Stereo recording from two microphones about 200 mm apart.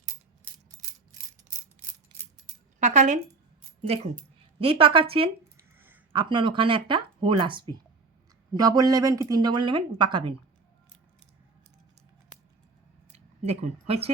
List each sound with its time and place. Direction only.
2.8 s speech: 35° right (ahead or behind)
6.1 s speech: 25° right (ahead or behind)
13.1 s speech: 30° right (ahead or behind)